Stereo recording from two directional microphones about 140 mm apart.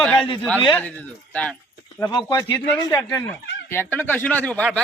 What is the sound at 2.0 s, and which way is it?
Speech, 25° left (ahead or behind).